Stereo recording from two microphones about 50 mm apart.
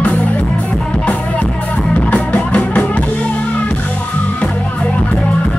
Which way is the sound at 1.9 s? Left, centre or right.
Left.